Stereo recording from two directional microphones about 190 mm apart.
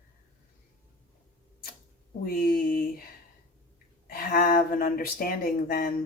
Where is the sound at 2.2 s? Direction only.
50° left (ahead or behind).